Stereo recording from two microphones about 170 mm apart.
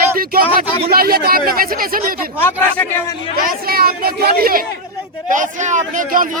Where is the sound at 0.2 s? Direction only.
60° right (ahead or behind).